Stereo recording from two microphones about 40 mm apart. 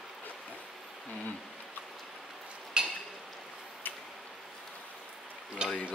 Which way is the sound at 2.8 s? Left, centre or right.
Right.